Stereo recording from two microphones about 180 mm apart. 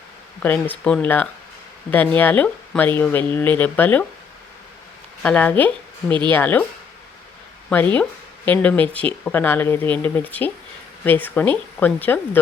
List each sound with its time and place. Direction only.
0.4 s speech: 10° left (ahead or behind)
5.2 s speech: 5° left (ahead or behind)
6.1 s speech: 25° right (ahead or behind)
6.3 s speech: 10° left (ahead or behind)
8.4 s speech: 10° left (ahead or behind)